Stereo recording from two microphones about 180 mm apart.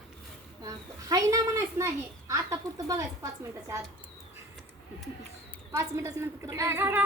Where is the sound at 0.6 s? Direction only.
20° right (ahead or behind).